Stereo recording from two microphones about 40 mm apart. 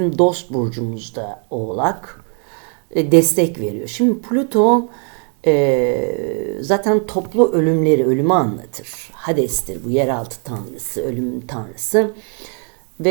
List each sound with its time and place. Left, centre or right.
0.0 s a woman's voice: centre